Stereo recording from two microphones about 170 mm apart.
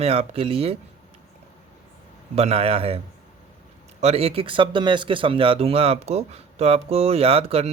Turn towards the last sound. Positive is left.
turn(degrees=-35)  # may be behind; listen again after turning